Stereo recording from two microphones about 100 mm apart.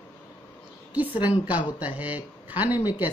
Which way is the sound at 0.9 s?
15° right (ahead or behind).